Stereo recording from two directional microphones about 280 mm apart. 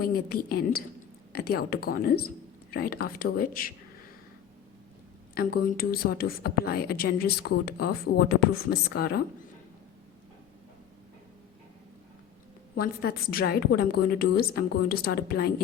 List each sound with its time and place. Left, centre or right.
0.0 s a woman's voice: left
5.3 s a woman's voice: left
12.7 s a woman's voice: left